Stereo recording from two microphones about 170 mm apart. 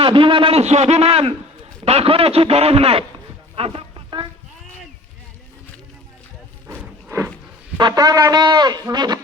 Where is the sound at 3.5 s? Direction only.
35° right (ahead or behind).